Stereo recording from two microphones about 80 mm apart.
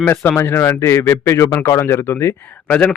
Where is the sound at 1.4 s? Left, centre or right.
Left.